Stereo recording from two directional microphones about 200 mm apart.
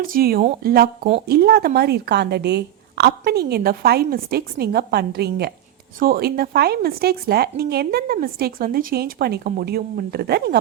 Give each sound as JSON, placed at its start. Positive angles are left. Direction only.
{"t": 0.0, "sound": "speech", "side_deg": -45}